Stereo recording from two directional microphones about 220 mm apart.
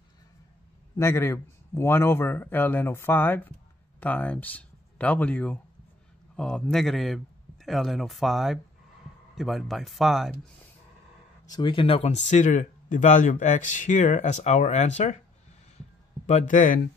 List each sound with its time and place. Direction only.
0.9 s speech: 10° left (ahead or behind)
11.5 s speech: 25° left (ahead or behind)
16.3 s speech: 35° left (ahead or behind)